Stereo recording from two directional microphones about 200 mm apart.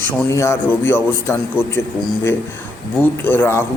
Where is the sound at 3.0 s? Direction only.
10° left (ahead or behind).